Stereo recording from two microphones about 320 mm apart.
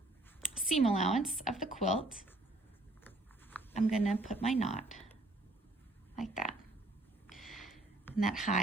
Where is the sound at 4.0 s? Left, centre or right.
Centre.